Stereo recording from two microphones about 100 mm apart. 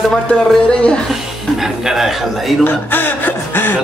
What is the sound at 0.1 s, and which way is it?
Speech, 10° left (ahead or behind).